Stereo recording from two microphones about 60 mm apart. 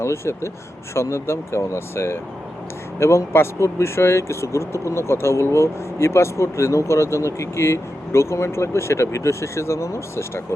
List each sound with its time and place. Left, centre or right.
0.0 s speech: left